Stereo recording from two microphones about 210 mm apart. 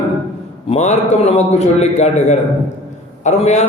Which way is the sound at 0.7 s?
30° left (ahead or behind).